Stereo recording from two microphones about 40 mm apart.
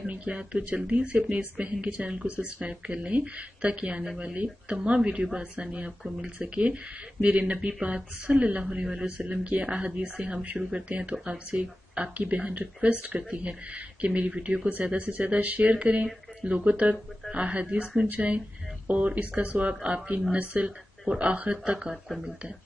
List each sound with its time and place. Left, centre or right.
0.0 s speech: right
5.9 s a man's voice: centre
6.3 s speech: right
8.4 s speech: right
8.8 s a man's voice: centre
9.3 s speech: right
18.9 s speech: right